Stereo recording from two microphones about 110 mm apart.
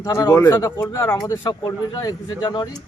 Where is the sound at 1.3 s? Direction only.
35° left (ahead or behind).